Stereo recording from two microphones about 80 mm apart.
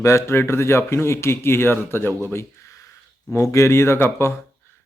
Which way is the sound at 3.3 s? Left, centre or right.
Left.